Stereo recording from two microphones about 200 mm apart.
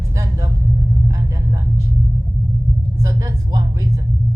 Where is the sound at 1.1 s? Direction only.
15° right (ahead or behind).